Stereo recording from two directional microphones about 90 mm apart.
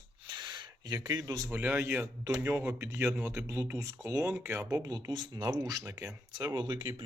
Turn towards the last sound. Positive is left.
turn(degrees=-55)  # may be behind; listen again after turning